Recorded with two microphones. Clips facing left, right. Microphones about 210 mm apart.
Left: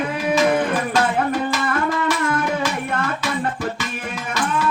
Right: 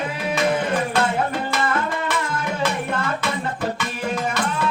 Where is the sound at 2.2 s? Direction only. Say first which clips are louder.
Left 6 dB; 55° left (ahead or behind).